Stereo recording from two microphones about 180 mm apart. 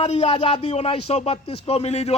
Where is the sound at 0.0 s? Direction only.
35° left (ahead or behind).